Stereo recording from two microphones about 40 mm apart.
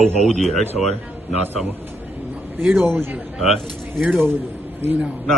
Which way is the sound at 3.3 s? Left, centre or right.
Centre.